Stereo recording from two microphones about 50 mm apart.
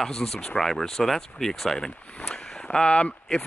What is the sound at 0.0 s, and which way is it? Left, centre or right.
Speech, centre.